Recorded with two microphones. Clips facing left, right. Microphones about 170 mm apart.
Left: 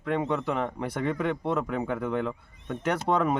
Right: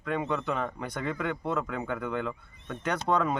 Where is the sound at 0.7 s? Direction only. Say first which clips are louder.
Left 4 dB; 30° left (ahead or behind).